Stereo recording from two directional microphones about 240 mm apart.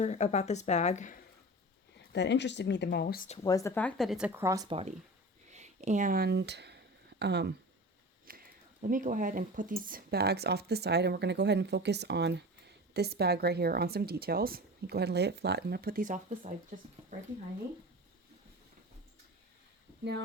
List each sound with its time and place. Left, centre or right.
0.0 s a woman's voice: left
2.1 s speech: left
3.3 s speech: centre; by 17.2 s right